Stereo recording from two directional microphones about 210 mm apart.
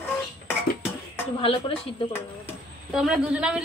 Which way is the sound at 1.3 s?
25° left (ahead or behind).